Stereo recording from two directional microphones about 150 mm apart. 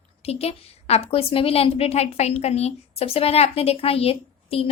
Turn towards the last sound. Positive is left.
turn(degrees=40)  # may be behind; listen again after turning